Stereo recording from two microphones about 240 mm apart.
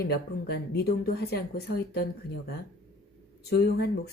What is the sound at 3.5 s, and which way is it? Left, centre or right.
Speech, left.